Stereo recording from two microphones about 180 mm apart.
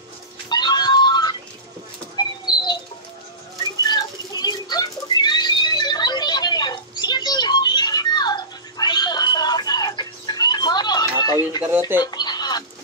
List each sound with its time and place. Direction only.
0.5 s music: 25° left (ahead or behind)
2.4 s bird flight: 25° left (ahead or behind)
3.9 s bird: 20° left (ahead or behind)
12.0 s a sound: 20° left (ahead or behind)